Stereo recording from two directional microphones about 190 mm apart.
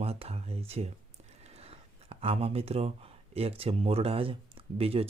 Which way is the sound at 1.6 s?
30° right (ahead or behind).